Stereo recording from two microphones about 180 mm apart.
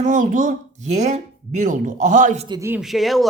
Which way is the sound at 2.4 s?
25° right (ahead or behind).